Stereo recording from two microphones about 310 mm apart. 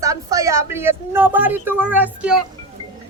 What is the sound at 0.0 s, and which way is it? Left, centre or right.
Speech, centre.